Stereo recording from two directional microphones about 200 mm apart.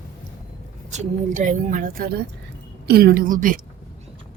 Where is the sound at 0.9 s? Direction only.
35° right (ahead or behind).